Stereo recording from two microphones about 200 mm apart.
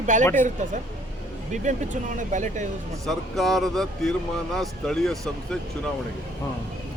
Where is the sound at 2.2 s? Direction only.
40° right (ahead or behind).